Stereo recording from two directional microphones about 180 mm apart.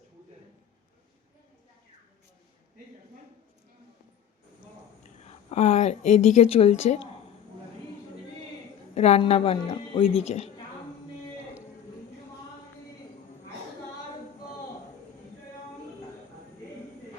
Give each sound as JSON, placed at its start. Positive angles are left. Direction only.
{"t": 5.3, "sound": "a woman's voice", "side_deg": 35}
{"t": 9.0, "sound": "a woman's voice", "side_deg": 35}